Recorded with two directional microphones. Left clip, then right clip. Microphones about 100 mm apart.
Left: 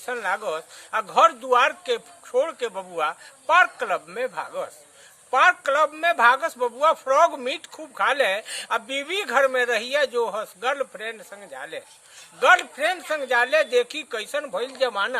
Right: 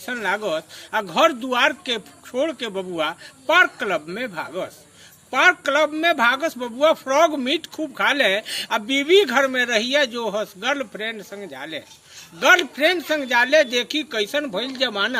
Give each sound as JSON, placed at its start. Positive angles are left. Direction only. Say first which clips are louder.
{"t": 0.0, "sound": "a man's voice", "louder": "right 2 dB", "side_deg": 30}